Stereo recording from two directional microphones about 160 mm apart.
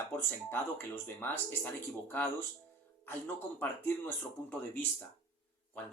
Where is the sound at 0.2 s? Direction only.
15° left (ahead or behind).